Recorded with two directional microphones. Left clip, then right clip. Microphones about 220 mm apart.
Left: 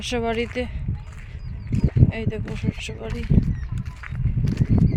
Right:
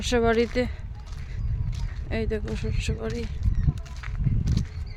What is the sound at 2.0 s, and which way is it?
Speech, 5° right (ahead or behind).